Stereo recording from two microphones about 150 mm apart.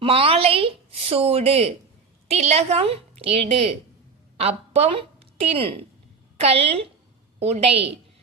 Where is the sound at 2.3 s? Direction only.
45° right (ahead or behind).